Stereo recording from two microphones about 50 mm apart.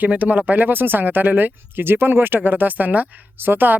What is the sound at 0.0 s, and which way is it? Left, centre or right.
Speech, right.